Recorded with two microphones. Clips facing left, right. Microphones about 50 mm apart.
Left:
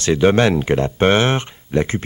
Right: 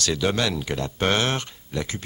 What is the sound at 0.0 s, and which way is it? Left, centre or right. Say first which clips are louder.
Speech: left 9 dB; left.